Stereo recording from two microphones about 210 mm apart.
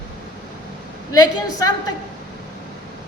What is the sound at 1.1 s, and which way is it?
Speech, 20° left (ahead or behind).